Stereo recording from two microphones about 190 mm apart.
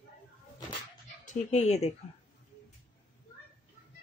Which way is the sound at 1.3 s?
35° left (ahead or behind).